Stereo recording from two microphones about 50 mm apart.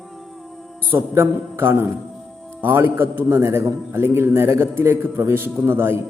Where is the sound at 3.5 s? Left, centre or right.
Right.